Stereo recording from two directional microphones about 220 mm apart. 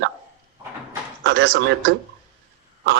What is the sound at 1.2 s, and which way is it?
Speech, 50° right (ahead or behind).